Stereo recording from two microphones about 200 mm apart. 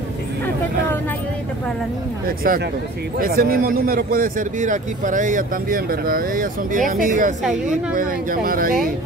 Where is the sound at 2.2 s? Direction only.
45° right (ahead or behind).